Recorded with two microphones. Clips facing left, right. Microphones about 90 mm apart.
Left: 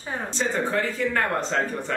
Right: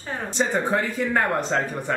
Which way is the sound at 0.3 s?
15° right (ahead or behind).